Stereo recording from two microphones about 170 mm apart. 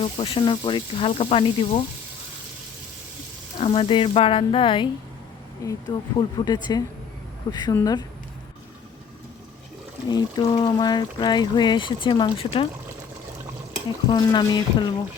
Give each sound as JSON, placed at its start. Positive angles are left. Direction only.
{"t": 0.0, "sound": "speech", "side_deg": 30}
{"t": 3.6, "sound": "speech", "side_deg": 30}
{"t": 10.1, "sound": "speech", "side_deg": 25}
{"t": 14.1, "sound": "speech", "side_deg": 25}